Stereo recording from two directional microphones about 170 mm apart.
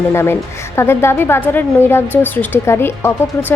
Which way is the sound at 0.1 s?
15° left (ahead or behind).